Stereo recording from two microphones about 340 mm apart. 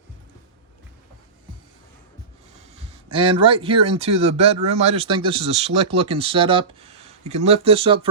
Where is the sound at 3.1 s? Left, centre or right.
Centre.